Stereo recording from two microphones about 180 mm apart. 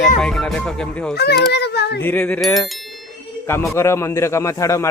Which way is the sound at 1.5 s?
70° left (ahead or behind).